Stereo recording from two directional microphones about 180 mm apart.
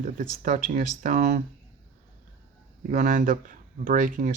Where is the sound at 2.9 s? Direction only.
50° right (ahead or behind).